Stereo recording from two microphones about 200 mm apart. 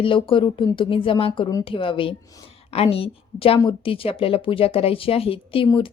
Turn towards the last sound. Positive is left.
turn(degrees=25)  # may be behind; listen again after turning